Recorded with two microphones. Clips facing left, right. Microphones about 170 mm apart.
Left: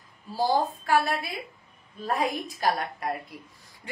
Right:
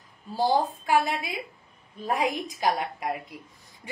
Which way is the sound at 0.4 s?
20° right (ahead or behind).